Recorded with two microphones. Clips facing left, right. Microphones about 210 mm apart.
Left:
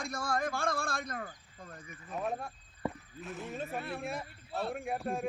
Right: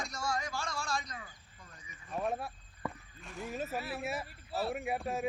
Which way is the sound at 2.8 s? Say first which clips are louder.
Left 4 dB; 25° left (ahead or behind).